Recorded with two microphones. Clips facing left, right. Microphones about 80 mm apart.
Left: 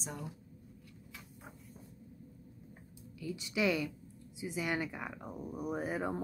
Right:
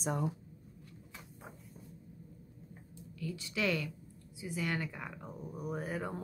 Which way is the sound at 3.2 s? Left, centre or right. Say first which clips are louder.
Left 2 dB; centre.